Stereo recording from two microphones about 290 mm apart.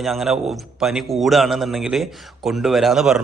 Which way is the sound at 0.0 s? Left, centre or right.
Centre.